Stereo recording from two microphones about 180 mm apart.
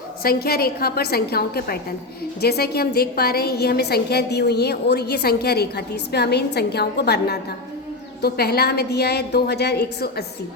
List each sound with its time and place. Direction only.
0.2 s a woman's voice: 55° left (ahead or behind)